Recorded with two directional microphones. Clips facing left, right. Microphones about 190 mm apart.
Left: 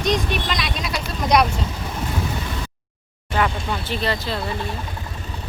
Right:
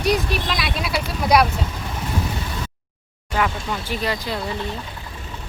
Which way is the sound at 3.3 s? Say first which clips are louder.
Left 1 dB; 10° right (ahead or behind).